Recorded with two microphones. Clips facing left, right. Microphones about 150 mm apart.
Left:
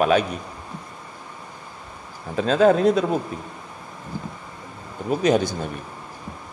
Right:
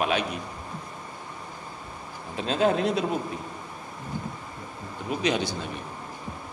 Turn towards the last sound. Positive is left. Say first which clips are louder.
# left 7 dB
turn(degrees=45)  # may be behind; listen again after turning